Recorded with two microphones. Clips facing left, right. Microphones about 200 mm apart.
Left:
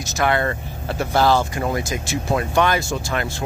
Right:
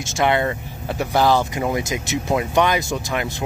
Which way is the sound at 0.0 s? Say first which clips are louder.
Right 1 dB; 20° right (ahead or behind).